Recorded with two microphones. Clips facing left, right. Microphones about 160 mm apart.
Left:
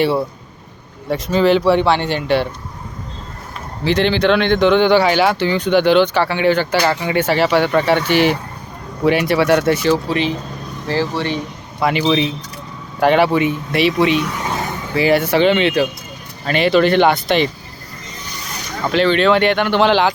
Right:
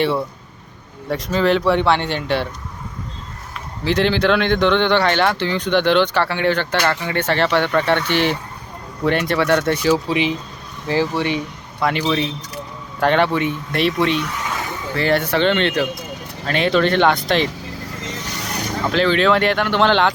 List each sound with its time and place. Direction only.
0.0 s speech: 5° left (ahead or behind)
3.8 s speech: centre (ahead or behind)
9.9 s speech: 15° right (ahead or behind)
11.8 s speech: 5° left (ahead or behind)
18.0 s vehicle: 90° right
18.9 s speech: centre (ahead or behind)